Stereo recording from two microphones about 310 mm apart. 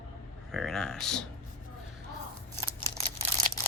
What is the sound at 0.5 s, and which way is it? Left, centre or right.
Speech, centre.